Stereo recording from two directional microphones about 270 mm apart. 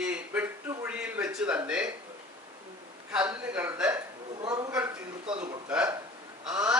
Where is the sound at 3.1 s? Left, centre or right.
Centre.